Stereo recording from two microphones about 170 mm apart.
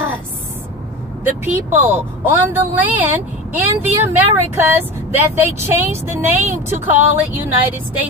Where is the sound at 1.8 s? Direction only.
10° right (ahead or behind).